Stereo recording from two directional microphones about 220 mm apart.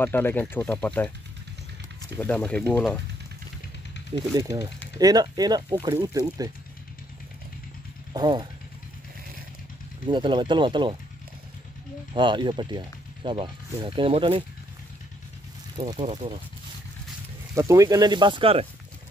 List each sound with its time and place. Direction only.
0.0 s speech: 10° left (ahead or behind)
2.1 s speech: 5° left (ahead or behind)
4.3 s speech: 15° right (ahead or behind)
8.1 s speech: 20° right (ahead or behind)
10.0 s speech: 20° right (ahead or behind)
12.1 s speech: 20° right (ahead or behind)
15.8 s speech: 25° right (ahead or behind)
17.6 s speech: 15° right (ahead or behind)